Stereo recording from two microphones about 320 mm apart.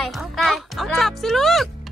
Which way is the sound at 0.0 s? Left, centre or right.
Centre.